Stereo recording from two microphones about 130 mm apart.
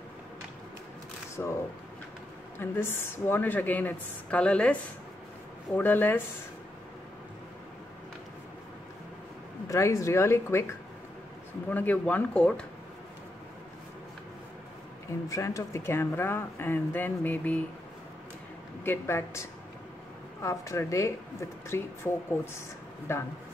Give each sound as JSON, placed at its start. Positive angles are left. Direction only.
{"t": 1.4, "sound": "speech", "side_deg": 20}
{"t": 2.6, "sound": "speech", "side_deg": 15}
{"t": 5.8, "sound": "speech", "side_deg": 15}
{"t": 9.7, "sound": "speech", "side_deg": 25}
{"t": 15.2, "sound": "speech", "side_deg": 25}
{"t": 18.9, "sound": "speech", "side_deg": 20}
{"t": 20.4, "sound": "speech", "side_deg": 25}